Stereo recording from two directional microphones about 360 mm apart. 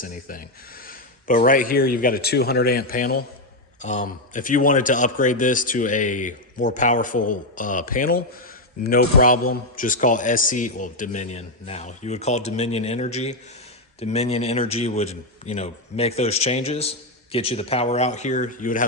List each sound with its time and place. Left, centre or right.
0.0 s a man's voice: left